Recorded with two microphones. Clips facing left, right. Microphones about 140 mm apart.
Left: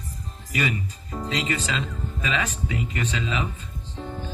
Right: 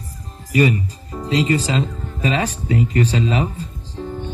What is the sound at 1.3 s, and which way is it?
Speech, 35° right (ahead or behind).